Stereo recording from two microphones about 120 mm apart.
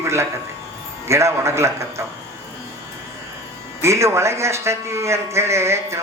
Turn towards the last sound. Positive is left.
turn(degrees=-25)  # may be behind; listen again after turning